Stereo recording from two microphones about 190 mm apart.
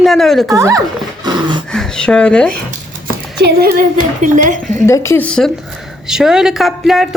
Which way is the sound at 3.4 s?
55° right (ahead or behind).